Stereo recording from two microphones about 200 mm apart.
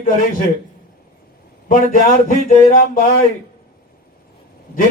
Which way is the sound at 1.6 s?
45° left (ahead or behind).